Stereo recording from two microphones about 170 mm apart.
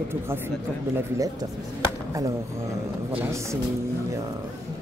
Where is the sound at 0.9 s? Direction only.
20° right (ahead or behind).